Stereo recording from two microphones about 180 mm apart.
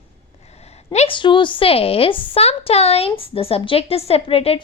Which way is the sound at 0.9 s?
35° left (ahead or behind).